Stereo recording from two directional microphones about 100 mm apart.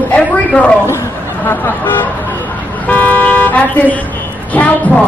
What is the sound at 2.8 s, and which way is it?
Car, 15° left (ahead or behind).